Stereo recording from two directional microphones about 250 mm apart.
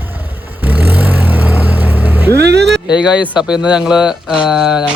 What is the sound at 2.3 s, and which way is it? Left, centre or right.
Music, right.